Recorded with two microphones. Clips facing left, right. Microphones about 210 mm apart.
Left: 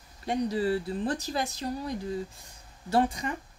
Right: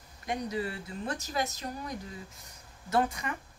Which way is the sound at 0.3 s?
35° left (ahead or behind).